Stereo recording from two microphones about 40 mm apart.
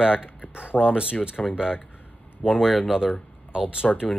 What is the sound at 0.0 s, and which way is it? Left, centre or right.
Speech, right.